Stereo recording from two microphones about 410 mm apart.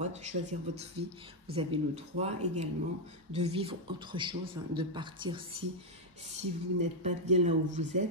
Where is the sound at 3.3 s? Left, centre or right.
Centre.